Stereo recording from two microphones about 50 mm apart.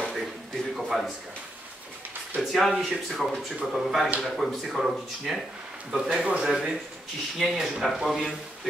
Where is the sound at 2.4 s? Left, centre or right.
Centre.